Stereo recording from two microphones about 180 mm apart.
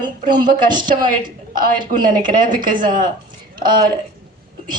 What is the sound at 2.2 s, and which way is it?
Speech, 50° right (ahead or behind).